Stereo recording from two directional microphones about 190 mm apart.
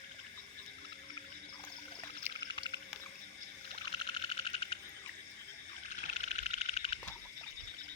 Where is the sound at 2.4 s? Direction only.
20° left (ahead or behind).